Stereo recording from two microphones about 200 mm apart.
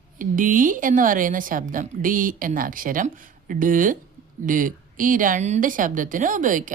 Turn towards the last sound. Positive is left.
turn(degrees=-40)  # may be behind; listen again after turning